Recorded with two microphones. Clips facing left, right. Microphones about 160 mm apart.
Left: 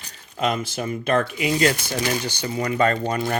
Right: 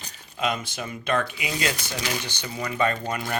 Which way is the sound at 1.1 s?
35° left (ahead or behind).